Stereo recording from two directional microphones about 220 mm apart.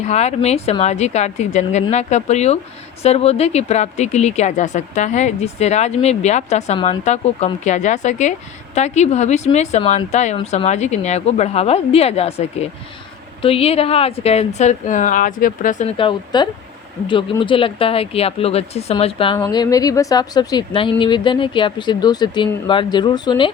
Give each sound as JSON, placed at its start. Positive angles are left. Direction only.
{"t": 0.0, "sound": "speech", "side_deg": 30}